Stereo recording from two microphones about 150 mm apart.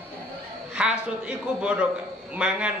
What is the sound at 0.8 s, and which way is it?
A man's voice, 5° right (ahead or behind).